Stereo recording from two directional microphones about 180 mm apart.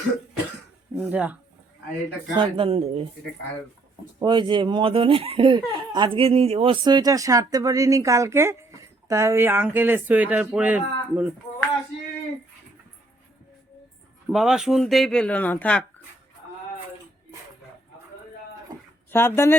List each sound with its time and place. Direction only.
0.9 s speech: 10° right (ahead or behind)
2.3 s speech: 30° right (ahead or behind)
4.2 s speech: 25° right (ahead or behind); by 11.3 s 10° right (ahead or behind)
14.3 s speech: centre (ahead or behind)
19.1 s speech: 15° left (ahead or behind)